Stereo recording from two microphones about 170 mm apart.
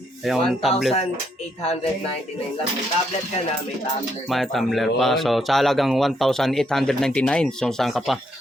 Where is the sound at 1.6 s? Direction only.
35° left (ahead or behind).